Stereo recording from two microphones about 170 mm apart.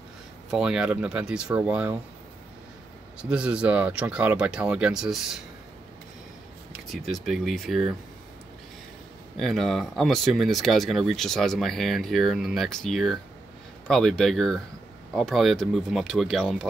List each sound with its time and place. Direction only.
0.5 s speech: 5° right (ahead or behind)
3.2 s speech: 5° right (ahead or behind)
6.9 s speech: centre (ahead or behind)
9.4 s speech: centre (ahead or behind)